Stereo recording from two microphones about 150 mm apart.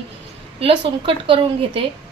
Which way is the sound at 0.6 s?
35° right (ahead or behind).